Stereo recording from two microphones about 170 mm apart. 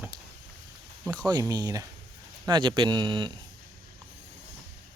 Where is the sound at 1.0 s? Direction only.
5° left (ahead or behind).